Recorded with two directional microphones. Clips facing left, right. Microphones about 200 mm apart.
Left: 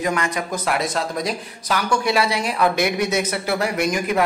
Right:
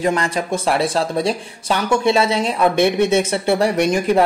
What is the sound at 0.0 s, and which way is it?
Speech, 30° right (ahead or behind).